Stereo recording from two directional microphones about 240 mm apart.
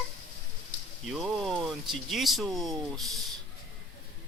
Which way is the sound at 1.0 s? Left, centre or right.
Centre.